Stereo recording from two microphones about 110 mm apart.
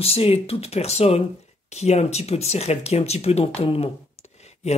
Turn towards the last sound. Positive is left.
turn(degrees=80)